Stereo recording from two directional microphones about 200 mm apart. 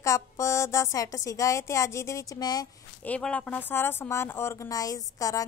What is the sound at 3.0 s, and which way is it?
A woman's voice, 5° left (ahead or behind).